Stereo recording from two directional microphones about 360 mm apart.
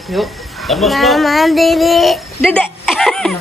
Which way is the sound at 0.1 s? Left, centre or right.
Centre.